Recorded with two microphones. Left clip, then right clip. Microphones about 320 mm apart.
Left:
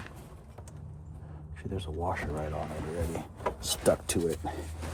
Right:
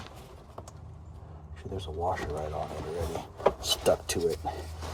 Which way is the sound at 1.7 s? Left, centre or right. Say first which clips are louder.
Right 2 dB; left.